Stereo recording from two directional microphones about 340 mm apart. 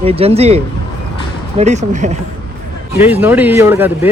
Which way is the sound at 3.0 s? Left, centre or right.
Centre.